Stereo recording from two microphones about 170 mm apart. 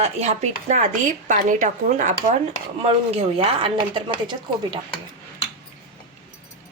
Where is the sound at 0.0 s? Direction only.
45° right (ahead or behind).